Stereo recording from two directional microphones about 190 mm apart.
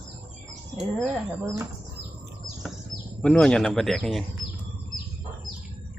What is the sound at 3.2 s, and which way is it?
Speech, 5° left (ahead or behind).